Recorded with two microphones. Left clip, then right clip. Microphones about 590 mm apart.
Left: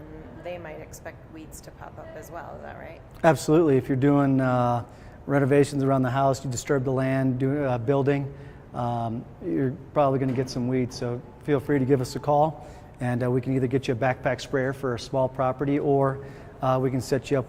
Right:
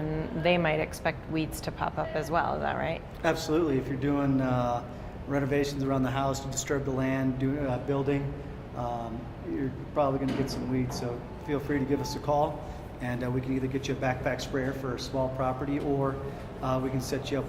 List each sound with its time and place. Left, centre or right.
0.4 s a woman's voice: right
3.2 s a man's voice: left
8.7 s a man's voice: left